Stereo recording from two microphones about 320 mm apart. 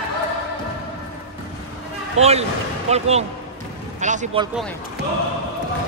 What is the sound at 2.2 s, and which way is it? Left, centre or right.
Speech, centre.